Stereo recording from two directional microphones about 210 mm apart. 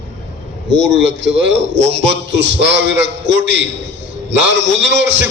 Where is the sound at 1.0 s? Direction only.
55° right (ahead or behind).